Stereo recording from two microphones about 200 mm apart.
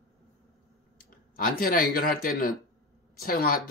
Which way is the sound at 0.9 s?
45° left (ahead or behind).